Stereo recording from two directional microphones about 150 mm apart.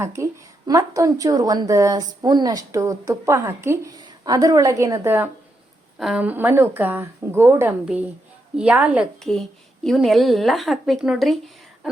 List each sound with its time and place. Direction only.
0.0 s a woman's voice: 20° right (ahead or behind)
6.0 s a woman's voice: 5° right (ahead or behind)
9.2 s a woman's voice: 5° left (ahead or behind)